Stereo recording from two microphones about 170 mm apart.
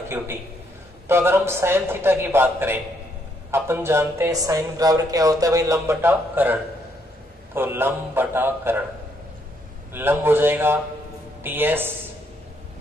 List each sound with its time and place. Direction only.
1.0 s speech: 15° right (ahead or behind)
9.9 s speech: 10° right (ahead or behind)